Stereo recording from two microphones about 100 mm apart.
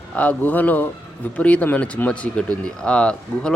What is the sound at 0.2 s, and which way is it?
A man's voice, 15° left (ahead or behind).